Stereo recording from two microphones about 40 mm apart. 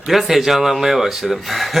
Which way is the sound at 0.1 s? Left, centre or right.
Centre.